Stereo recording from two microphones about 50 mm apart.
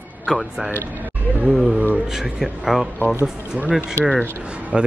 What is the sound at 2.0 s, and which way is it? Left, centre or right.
Speech, centre.